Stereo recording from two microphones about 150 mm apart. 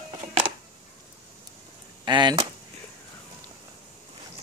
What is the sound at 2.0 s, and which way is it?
Speech, 30° right (ahead or behind).